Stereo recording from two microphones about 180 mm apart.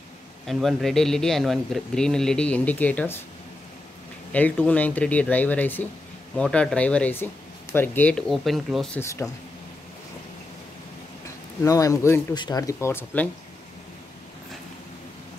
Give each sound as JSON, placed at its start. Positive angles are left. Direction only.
{"t": 0.5, "sound": "a man's voice", "side_deg": 0}
{"t": 4.3, "sound": "speech", "side_deg": 10}
{"t": 9.0, "sound": "speech", "side_deg": 15}
{"t": 11.2, "sound": "speech", "side_deg": 20}